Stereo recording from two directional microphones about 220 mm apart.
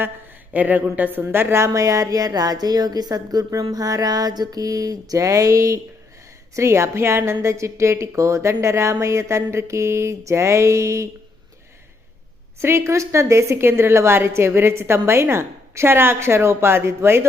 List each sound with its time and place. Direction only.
0.5 s a woman's voice: 5° right (ahead or behind)
12.5 s a woman's voice: 10° right (ahead or behind)